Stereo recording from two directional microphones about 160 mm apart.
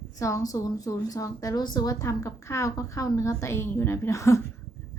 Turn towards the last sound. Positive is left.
turn(degrees=20)  # may be behind; listen again after turning